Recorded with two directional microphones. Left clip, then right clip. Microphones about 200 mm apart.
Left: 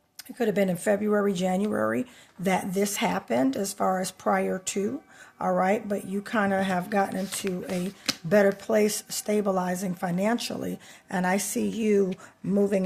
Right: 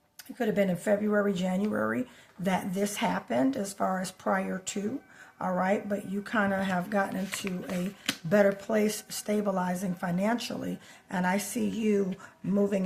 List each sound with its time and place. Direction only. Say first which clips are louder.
0.3 s speech: left 3 dB; 40° left (ahead or behind)